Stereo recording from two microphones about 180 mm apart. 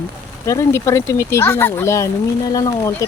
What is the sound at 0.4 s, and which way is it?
Speech, 15° left (ahead or behind).